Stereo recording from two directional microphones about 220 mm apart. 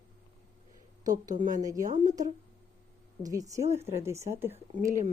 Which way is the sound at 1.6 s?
15° right (ahead or behind).